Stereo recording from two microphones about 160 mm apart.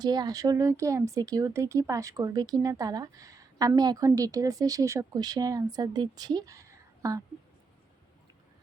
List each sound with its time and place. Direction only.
0.0 s speech: 25° right (ahead or behind)